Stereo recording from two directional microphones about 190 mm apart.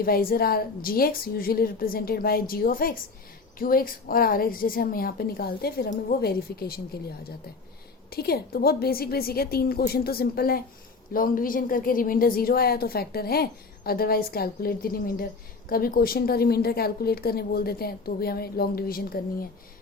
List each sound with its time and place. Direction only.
0.0 s a woman's voice: 50° left (ahead or behind)
8.1 s a woman's voice: 55° left (ahead or behind)